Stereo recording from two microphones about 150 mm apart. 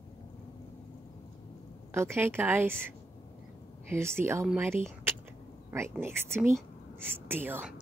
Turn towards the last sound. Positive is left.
turn(degrees=-15)  # may be behind; listen again after turning